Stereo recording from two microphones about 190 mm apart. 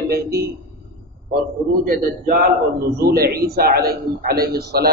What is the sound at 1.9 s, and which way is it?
A man's voice, 50° right (ahead or behind).